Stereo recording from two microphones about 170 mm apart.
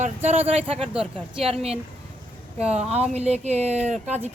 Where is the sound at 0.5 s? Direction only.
35° right (ahead or behind).